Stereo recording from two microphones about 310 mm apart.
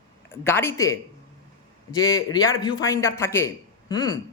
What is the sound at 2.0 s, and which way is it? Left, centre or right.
A man's voice, centre.